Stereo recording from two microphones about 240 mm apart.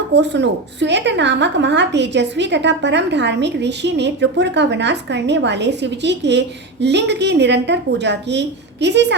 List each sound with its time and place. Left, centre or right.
0.1 s a woman's voice: right